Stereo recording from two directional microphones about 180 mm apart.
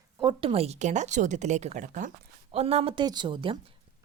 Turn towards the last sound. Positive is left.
turn(degrees=-30)  # may be behind; listen again after turning